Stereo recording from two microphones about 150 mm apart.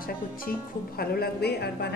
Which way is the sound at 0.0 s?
85° left.